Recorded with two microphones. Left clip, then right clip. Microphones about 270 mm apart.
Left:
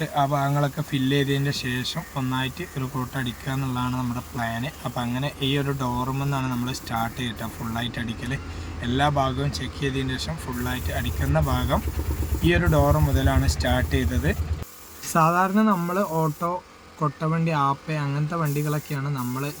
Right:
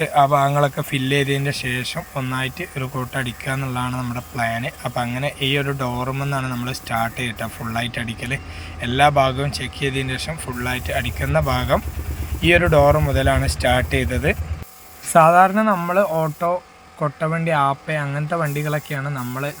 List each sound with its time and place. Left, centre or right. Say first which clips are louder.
0.0 s speech: right 8 dB; centre